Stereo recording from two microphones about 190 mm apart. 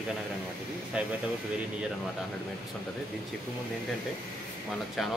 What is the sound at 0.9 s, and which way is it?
Speech, 5° right (ahead or behind).